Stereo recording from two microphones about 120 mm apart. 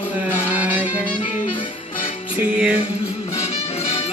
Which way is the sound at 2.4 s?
10° right (ahead or behind).